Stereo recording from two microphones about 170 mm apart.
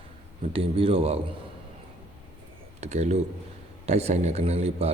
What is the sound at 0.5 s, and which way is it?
Speech, 35° right (ahead or behind).